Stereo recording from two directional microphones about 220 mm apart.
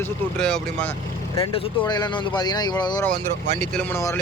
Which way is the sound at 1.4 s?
25° left (ahead or behind).